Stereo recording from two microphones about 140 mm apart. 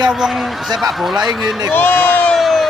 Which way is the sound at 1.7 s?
10° left (ahead or behind).